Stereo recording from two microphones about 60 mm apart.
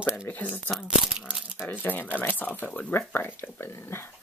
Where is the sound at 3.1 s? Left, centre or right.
Left.